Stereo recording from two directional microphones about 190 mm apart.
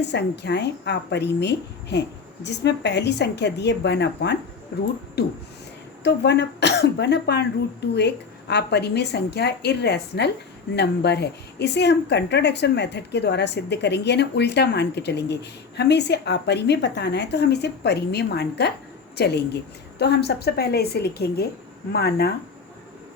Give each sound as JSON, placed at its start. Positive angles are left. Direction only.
{"t": 0.0, "sound": "a woman's voice", "side_deg": 65}